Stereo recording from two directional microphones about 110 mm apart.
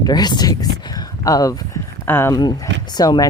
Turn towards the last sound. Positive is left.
turn(degrees=35)  # may be behind; listen again after turning